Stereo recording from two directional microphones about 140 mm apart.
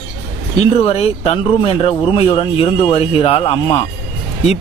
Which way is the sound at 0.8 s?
45° left (ahead or behind).